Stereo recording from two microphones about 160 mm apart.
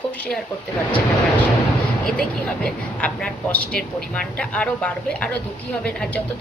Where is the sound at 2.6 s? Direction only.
5° left (ahead or behind).